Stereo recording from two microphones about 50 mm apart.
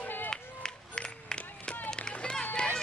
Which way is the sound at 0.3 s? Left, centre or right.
Centre.